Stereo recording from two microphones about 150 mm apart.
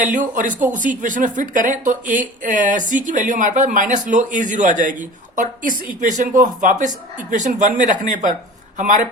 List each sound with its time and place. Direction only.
0.0 s speech: 60° right (ahead or behind)